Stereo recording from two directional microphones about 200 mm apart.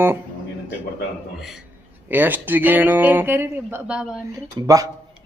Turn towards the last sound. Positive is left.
turn(degrees=-20)  # may be behind; listen again after turning